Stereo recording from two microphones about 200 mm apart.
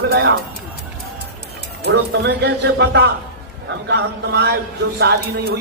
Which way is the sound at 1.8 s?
55° right (ahead or behind).